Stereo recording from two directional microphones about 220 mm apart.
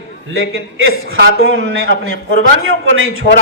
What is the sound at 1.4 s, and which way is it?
A man's voice, 40° left (ahead or behind).